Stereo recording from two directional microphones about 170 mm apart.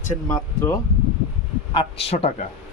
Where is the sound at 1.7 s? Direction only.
35° left (ahead or behind).